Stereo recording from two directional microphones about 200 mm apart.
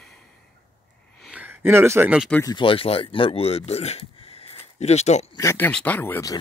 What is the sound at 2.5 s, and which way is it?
Speech, 25° left (ahead or behind).